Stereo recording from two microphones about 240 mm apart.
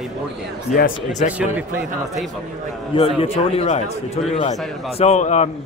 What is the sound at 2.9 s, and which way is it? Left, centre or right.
A man's voice, left.